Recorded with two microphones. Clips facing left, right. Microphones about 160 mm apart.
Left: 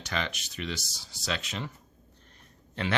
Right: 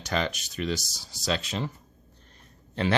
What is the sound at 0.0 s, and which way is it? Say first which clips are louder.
Speech: right 5 dB; 40° right (ahead or behind).